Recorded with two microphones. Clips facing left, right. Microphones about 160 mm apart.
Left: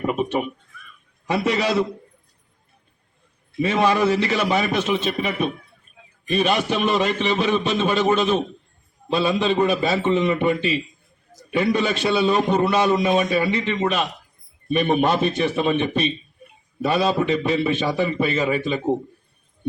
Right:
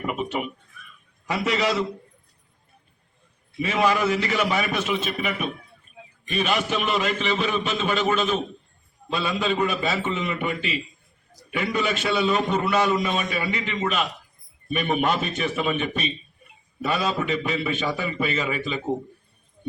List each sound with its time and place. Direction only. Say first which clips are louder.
0.0 s a sound: left 5 dB; 25° left (ahead or behind)
1.3 s a man's voice: left 3 dB; 30° left (ahead or behind)
3.6 s a man's voice: left 3 dB; 30° left (ahead or behind)